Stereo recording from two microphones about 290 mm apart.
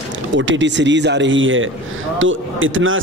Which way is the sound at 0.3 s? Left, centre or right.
Right.